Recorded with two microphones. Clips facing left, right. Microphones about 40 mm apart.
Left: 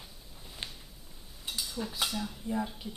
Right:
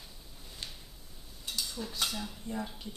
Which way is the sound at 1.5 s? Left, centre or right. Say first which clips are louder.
Even; centre.